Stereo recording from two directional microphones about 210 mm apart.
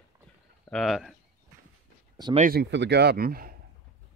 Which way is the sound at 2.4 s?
50° right (ahead or behind).